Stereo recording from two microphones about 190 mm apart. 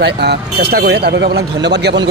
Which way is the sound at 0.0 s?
60° right (ahead or behind).